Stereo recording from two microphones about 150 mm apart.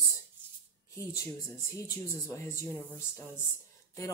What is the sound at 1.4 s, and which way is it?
Speech, 20° left (ahead or behind).